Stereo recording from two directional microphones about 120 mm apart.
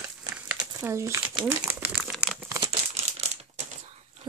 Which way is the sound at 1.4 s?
15° right (ahead or behind).